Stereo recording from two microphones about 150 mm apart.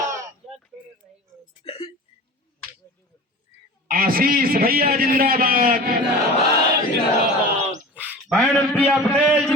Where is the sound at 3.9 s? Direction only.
70° right (ahead or behind).